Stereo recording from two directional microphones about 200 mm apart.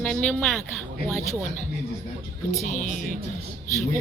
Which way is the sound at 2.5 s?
40° left (ahead or behind).